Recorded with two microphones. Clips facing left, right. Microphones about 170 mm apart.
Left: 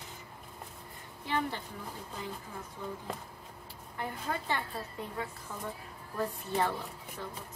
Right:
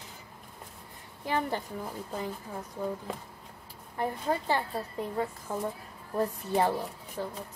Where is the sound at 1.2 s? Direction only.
45° right (ahead or behind).